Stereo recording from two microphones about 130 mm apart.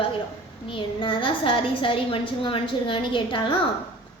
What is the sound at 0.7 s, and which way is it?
A woman's voice, 40° left (ahead or behind).